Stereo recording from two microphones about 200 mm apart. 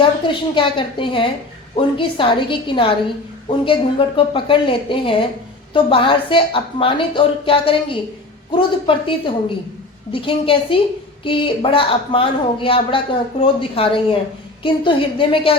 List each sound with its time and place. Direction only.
0.0 s a woman's voice: 25° left (ahead or behind)